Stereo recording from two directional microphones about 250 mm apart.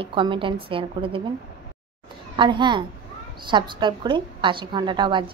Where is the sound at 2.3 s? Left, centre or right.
Centre.